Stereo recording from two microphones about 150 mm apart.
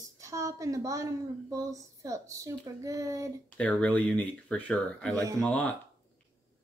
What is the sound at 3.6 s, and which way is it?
Speech, 10° left (ahead or behind).